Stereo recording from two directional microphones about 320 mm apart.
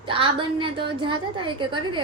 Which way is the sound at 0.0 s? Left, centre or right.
Centre.